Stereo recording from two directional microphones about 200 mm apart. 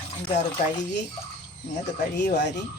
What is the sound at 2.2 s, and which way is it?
Speech, 60° left (ahead or behind).